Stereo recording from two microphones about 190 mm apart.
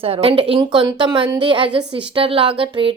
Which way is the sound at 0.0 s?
30° right (ahead or behind).